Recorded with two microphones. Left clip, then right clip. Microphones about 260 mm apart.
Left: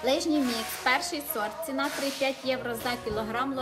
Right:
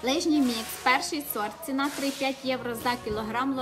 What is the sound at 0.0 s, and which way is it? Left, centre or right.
A woman's voice, centre.